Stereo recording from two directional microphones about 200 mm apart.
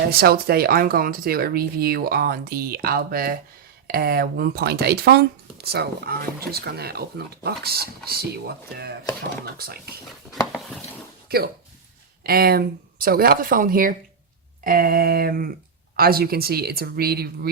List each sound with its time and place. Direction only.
0.1 s speech: 50° right (ahead or behind)
11.3 s speech: 50° right (ahead or behind)